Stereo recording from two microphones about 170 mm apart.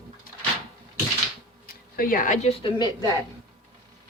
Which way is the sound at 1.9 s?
55° left (ahead or behind).